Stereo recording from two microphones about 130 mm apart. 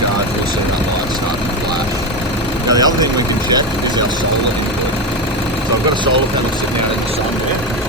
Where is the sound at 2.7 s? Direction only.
30° right (ahead or behind).